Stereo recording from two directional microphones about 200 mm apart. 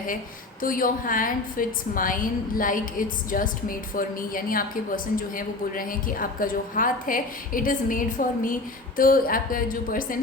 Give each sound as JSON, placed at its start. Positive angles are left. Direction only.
{"t": 0.6, "sound": "a woman's voice", "side_deg": 45}